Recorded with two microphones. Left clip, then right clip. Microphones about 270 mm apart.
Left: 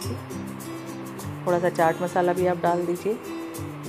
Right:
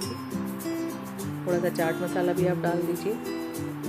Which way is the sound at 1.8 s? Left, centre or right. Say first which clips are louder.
Left 5 dB; centre.